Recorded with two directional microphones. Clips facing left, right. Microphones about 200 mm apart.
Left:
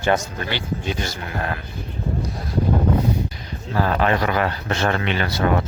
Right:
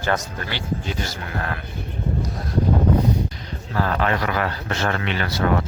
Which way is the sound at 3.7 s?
20° left (ahead or behind).